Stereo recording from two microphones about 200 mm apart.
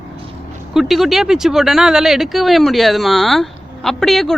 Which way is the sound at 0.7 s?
Centre (ahead or behind).